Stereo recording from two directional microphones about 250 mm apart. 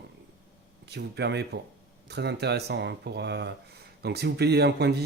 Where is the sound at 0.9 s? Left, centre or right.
Right.